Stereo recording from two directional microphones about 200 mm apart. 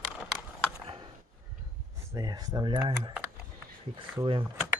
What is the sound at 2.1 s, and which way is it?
Speech, 20° right (ahead or behind).